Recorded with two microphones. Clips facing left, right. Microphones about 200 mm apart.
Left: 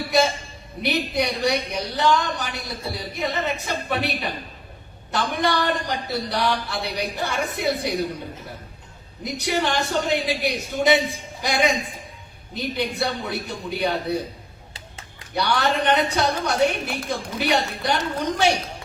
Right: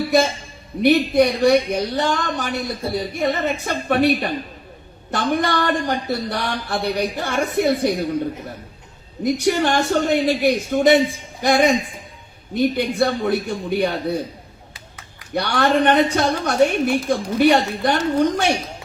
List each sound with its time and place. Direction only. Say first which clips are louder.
0.8 s a man's voice: right 9 dB; 50° right (ahead or behind)
9.2 s a man's voice: right 6 dB; 50° right (ahead or behind)
15.4 s a man's voice: right 4 dB; 50° right (ahead or behind)